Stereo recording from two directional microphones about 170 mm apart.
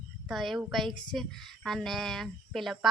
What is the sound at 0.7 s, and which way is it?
Speech, centre (ahead or behind).